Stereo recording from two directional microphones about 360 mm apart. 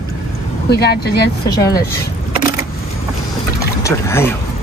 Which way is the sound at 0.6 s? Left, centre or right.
Left.